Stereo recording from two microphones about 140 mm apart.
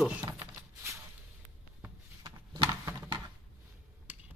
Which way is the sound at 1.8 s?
25° right (ahead or behind).